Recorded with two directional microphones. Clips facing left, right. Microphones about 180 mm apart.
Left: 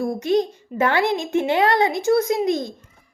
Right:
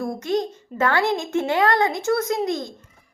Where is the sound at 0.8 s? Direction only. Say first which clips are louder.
Left 1 dB; 20° left (ahead or behind).